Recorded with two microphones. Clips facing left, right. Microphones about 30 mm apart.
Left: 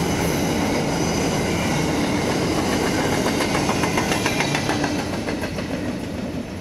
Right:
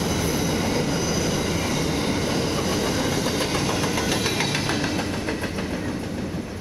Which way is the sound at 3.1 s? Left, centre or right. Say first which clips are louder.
Left 3 dB; left.